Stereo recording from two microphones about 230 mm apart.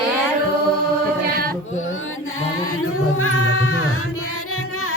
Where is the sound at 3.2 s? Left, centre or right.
Left.